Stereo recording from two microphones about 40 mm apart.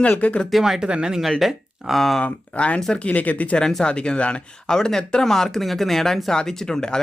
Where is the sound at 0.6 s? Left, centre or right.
Centre.